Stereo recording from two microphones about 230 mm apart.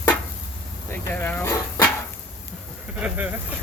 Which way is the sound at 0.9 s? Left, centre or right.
Centre.